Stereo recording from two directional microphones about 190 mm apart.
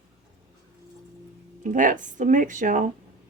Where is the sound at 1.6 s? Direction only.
45° right (ahead or behind).